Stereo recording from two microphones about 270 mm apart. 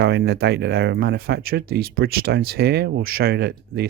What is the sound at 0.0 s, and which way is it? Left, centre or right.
Speech, right.